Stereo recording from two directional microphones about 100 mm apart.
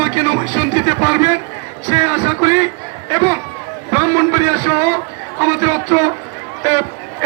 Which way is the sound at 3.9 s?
30° right (ahead or behind).